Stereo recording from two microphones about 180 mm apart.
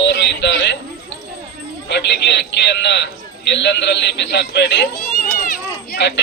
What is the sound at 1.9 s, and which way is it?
A man's voice, 75° left (ahead or behind).